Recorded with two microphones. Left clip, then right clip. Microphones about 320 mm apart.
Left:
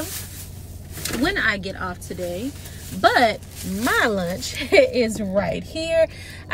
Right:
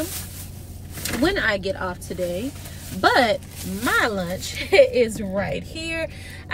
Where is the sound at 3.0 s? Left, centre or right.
Centre.